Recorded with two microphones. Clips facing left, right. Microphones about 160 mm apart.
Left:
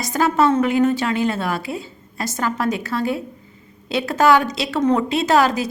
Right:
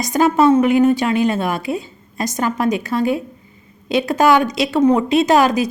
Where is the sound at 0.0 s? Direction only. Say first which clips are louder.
Right 4 dB; 15° right (ahead or behind).